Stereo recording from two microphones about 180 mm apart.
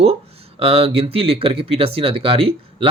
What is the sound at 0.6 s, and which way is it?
Speech, 30° right (ahead or behind).